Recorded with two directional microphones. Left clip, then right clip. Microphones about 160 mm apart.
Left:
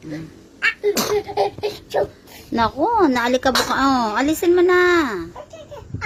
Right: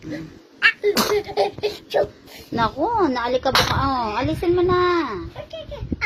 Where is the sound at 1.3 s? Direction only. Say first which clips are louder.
Left 1 dB; 50° left (ahead or behind).